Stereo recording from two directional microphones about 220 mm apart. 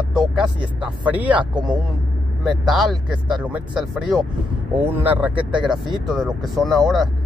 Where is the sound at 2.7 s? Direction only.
Centre (ahead or behind).